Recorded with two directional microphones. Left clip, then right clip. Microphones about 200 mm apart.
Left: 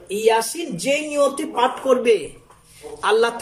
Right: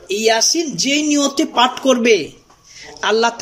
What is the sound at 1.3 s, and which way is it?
Speech, 45° right (ahead or behind).